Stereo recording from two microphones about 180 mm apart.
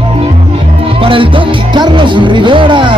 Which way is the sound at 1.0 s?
30° right (ahead or behind).